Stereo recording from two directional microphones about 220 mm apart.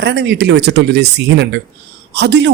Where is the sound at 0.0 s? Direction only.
50° right (ahead or behind).